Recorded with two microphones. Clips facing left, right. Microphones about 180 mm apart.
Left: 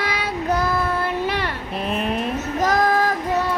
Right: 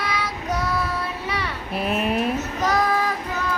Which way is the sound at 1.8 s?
5° right (ahead or behind).